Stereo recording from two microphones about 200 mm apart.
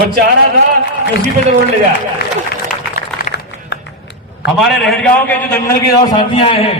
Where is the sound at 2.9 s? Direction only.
45° left (ahead or behind).